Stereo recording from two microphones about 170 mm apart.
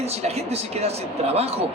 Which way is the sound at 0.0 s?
40° right (ahead or behind).